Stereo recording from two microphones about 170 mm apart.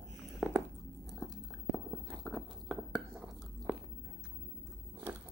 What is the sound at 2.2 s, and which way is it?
Biting, centre (ahead or behind).